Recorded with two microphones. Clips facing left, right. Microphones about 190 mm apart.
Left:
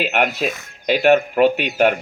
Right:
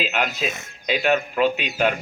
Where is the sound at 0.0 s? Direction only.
60° left (ahead or behind).